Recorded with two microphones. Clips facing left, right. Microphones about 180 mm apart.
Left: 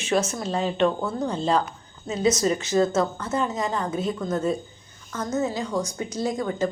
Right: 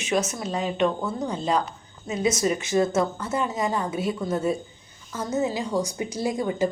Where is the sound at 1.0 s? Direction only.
20° right (ahead or behind).